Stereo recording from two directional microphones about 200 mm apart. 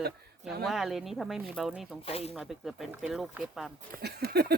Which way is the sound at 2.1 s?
30° left (ahead or behind).